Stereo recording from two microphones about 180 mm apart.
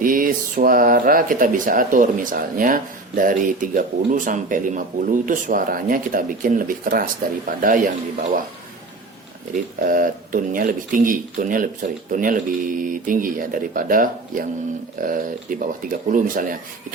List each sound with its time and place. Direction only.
0.0 s speech: 50° right (ahead or behind)
9.8 s speech: 50° right (ahead or behind)